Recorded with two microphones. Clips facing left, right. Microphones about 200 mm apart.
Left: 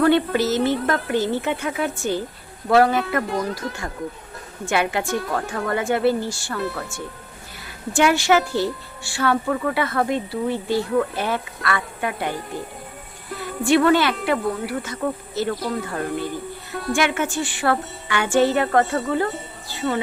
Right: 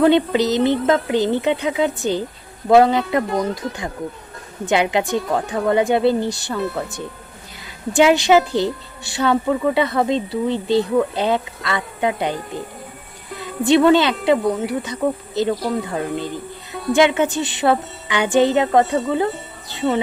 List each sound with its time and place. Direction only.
0.0 s a woman's voice: 20° right (ahead or behind)
3.2 s speech: centre (ahead or behind)
4.6 s a woman's voice: 20° right (ahead or behind)